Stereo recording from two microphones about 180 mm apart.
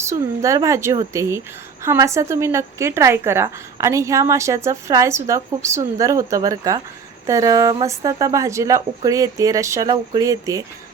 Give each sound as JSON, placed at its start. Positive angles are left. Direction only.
{"t": 0.0, "sound": "a woman's voice", "side_deg": -15}